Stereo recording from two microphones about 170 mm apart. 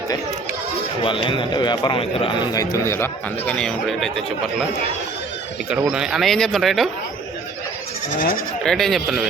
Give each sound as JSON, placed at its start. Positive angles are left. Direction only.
{"t": 1.0, "sound": "a man's voice", "side_deg": 30}
{"t": 2.6, "sound": "speech", "side_deg": 15}
{"t": 5.6, "sound": "speech", "side_deg": -5}
{"t": 8.6, "sound": "speech", "side_deg": 0}